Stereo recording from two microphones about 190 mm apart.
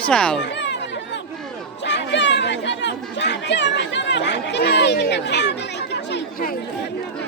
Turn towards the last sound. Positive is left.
turn(degrees=55)  # may be behind; listen again after turning